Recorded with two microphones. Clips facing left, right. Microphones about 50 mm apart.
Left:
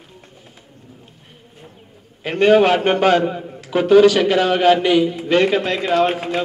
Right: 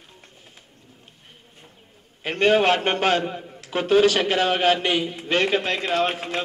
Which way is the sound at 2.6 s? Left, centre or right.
Centre.